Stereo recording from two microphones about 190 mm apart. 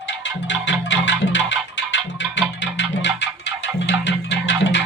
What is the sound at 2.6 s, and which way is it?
Music, 70° left (ahead or behind).